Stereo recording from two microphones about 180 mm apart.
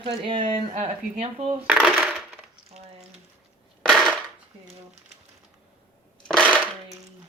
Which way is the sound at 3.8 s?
Centre (ahead or behind).